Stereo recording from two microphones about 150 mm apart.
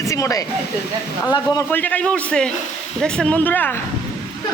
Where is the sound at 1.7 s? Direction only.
10° left (ahead or behind).